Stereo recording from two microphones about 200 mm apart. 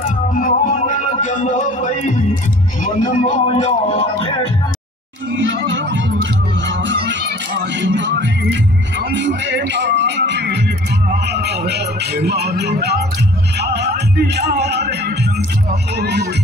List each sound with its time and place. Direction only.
0.3 s music: 45° left (ahead or behind)
2.8 s speech: 40° left (ahead or behind)
5.4 s chatter: 70° right (ahead or behind)
6.9 s music: 65° right (ahead or behind)
16.0 s music: 55° right (ahead or behind)